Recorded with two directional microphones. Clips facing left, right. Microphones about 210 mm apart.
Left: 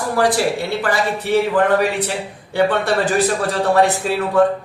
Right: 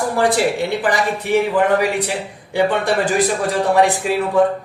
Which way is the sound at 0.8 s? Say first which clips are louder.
Right 1 dB; 15° right (ahead or behind).